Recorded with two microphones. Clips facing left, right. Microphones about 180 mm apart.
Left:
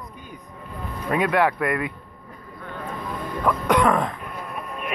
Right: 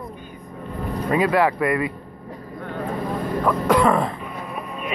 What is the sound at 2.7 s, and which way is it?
Vehicle, 35° right (ahead or behind).